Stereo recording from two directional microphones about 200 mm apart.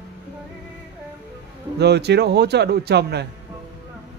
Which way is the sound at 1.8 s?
55° right (ahead or behind).